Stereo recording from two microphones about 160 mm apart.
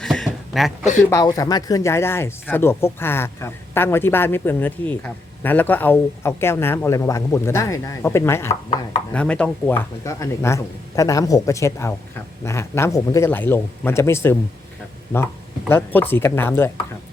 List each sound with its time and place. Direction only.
0.0 s a sound: 5° left (ahead or behind)
1.1 s speech: 25° left (ahead or behind)
15.7 s speech: 10° left (ahead or behind)